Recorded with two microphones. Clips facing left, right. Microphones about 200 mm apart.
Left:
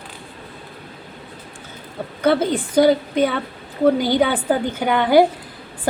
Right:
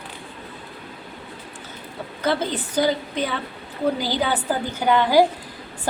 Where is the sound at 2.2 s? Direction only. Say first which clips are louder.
Left 6 dB; 55° left (ahead or behind).